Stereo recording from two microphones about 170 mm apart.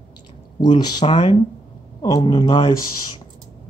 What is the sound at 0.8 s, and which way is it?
Speech, 30° left (ahead or behind).